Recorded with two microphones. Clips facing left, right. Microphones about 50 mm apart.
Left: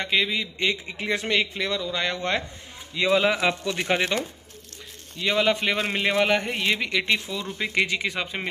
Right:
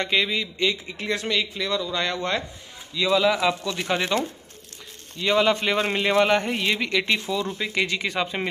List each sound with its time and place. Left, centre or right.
0.0 s speech: centre
0.6 s speech: left
1.8 s speech: centre
2.9 s speech: left
3.8 s speech: centre
5.2 s speech: centre
7.5 s speech: centre
8.1 s speech: centre